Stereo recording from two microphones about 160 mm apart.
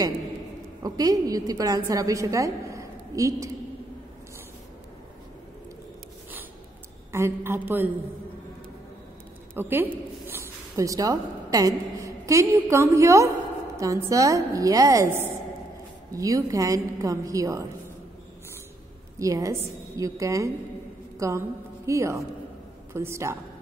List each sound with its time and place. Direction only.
0.8 s a woman's voice: 25° right (ahead or behind)
7.1 s a man's voice: 15° right (ahead or behind)
9.6 s a woman's voice: 15° right (ahead or behind)
19.1 s a woman's voice: 20° right (ahead or behind)